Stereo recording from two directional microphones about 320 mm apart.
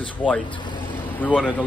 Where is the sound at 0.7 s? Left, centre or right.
Centre.